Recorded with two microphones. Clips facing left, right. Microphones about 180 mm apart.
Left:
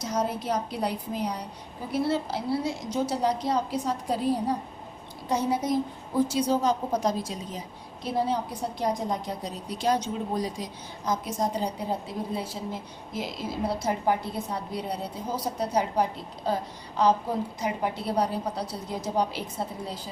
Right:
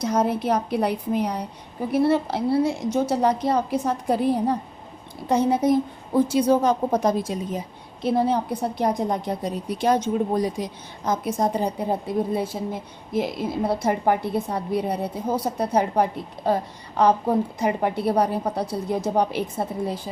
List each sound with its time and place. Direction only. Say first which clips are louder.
0.0 s a woman's voice: right 7 dB; 60° right (ahead or behind)